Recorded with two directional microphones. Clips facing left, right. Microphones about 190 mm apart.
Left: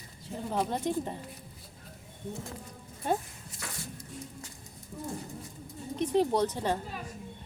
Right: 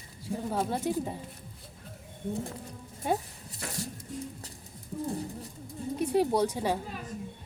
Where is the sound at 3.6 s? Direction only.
40° right (ahead or behind).